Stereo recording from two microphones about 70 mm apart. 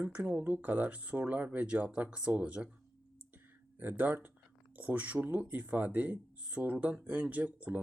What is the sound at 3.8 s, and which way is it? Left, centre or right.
Speech, right.